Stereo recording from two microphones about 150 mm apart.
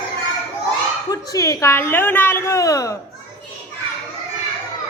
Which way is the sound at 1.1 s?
25° left (ahead or behind).